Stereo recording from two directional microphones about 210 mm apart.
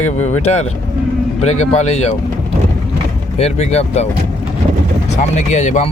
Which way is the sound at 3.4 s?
30° left (ahead or behind).